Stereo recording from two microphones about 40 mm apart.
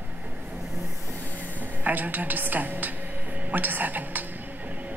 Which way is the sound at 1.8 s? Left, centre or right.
Right.